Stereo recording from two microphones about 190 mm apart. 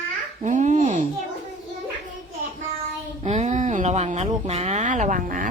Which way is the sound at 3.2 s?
40° right (ahead or behind).